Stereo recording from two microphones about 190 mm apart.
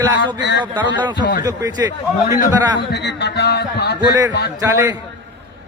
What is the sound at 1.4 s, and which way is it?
Speech, 20° right (ahead or behind).